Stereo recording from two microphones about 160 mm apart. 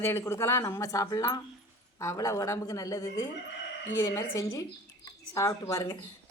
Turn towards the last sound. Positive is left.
turn(degrees=20)  # may be behind; listen again after turning